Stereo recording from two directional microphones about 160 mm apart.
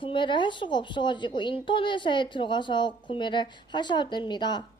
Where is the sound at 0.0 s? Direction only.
30° left (ahead or behind).